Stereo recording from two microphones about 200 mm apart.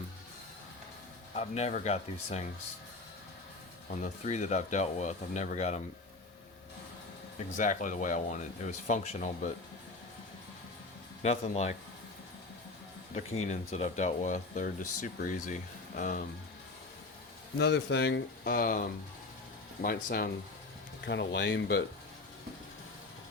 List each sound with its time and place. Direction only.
1.4 s speech: 35° left (ahead or behind)
3.8 s speech: 40° left (ahead or behind)
7.5 s speech: 40° left (ahead or behind)
11.2 s speech: 35° left (ahead or behind)
13.1 s speech: 35° left (ahead or behind)
17.6 s speech: 60° left (ahead or behind)
21.0 s speech: 60° left (ahead or behind)